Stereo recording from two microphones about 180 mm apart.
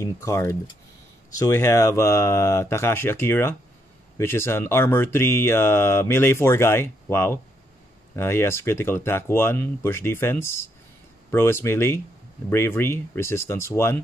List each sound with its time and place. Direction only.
0.0 s speech: 15° left (ahead or behind)